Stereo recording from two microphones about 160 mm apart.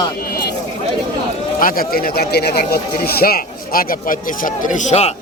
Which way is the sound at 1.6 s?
65° left (ahead or behind).